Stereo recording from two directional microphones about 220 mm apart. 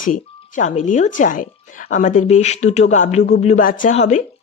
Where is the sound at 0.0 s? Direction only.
35° left (ahead or behind).